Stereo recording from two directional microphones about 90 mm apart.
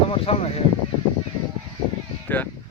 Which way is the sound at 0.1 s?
90° left.